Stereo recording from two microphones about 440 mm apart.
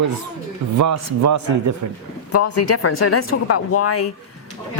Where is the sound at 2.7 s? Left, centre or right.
Left.